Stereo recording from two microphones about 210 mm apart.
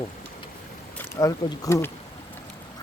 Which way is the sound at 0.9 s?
15° left (ahead or behind).